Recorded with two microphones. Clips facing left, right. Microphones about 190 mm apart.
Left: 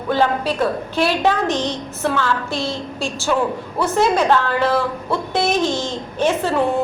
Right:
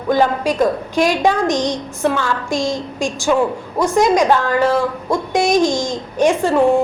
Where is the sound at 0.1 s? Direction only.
15° right (ahead or behind).